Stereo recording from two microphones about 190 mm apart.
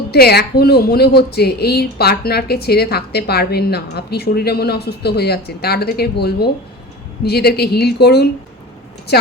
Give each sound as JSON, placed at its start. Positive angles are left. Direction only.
{"t": 0.1, "sound": "speech", "side_deg": 55}